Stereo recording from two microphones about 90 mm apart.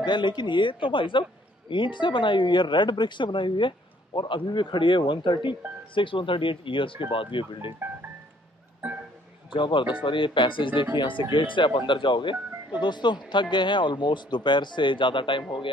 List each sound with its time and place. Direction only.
0.0 s speech: 55° left (ahead or behind)
9.5 s speech: 65° left (ahead or behind)